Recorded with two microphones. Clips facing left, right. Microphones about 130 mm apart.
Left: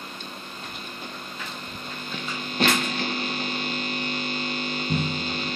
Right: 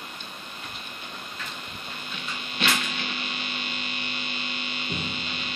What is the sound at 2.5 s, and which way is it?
Hum, 40° left (ahead or behind).